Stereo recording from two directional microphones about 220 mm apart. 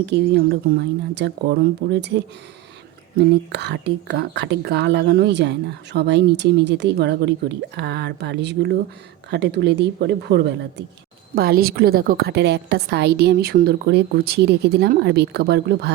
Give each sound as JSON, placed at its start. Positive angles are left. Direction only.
{"t": 0.0, "sound": "speech", "side_deg": -50}
{"t": 3.2, "sound": "speech", "side_deg": -50}